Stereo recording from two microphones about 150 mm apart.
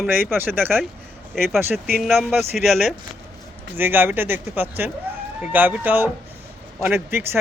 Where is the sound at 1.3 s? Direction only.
5° left (ahead or behind).